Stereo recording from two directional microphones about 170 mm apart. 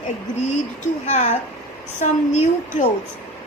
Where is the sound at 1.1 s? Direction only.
45° left (ahead or behind).